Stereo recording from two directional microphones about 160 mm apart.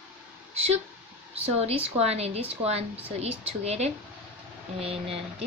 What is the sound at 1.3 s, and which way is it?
Speech, 40° right (ahead or behind).